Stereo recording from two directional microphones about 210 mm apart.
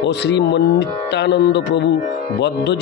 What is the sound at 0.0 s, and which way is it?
A man's voice, 55° left (ahead or behind).